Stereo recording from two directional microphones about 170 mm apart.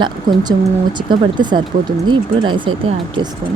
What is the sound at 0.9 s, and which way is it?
Speech, 25° right (ahead or behind).